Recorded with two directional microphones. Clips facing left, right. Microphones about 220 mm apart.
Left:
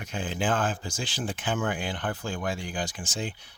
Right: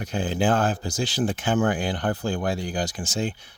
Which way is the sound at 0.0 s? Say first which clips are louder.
Right 6 dB; 35° right (ahead or behind).